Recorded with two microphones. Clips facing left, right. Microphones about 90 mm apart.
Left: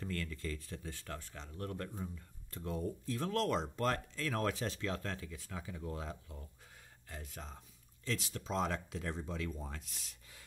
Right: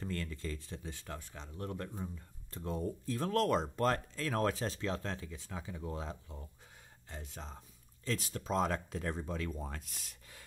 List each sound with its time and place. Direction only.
0.0 s speech: 30° right (ahead or behind)
8.0 s speech: 40° right (ahead or behind)